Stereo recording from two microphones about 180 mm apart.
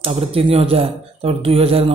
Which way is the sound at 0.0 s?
30° right (ahead or behind).